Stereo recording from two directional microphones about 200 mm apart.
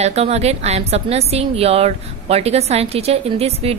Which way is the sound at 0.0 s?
30° right (ahead or behind).